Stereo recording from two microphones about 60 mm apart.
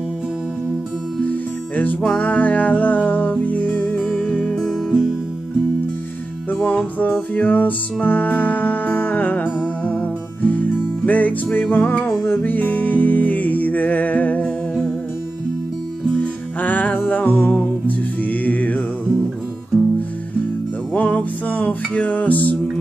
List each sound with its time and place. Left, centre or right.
1.2 s music: left
4.0 s music: centre
6.5 s music: left
16.2 s music: left
20.9 s music: left